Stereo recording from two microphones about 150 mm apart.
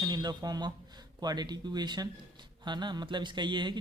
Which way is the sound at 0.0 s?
30° right (ahead or behind).